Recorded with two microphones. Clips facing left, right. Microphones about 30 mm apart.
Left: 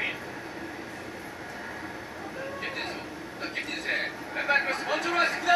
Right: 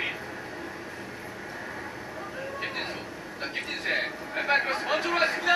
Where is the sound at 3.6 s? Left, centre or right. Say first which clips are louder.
Right 2 dB; centre.